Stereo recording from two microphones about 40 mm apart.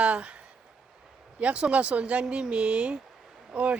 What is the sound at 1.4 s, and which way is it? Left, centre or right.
Speech, right.